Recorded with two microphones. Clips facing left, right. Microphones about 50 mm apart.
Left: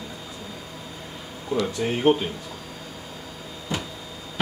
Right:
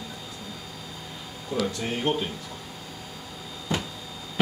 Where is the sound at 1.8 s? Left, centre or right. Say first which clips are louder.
Left 6 dB; centre.